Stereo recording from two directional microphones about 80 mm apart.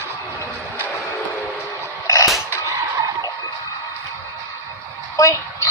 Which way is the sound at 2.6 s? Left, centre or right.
Right.